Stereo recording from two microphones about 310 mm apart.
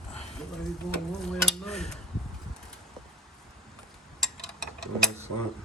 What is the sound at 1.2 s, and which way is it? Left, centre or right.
Stir, centre.